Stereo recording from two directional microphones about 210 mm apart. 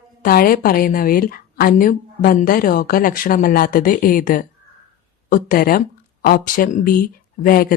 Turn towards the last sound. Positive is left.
turn(degrees=45)  # may be behind; listen again after turning